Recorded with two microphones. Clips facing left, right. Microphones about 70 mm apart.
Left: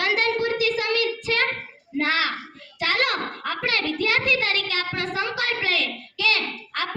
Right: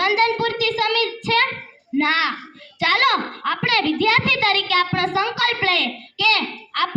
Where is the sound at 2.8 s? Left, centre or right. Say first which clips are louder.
Right 6 dB; right.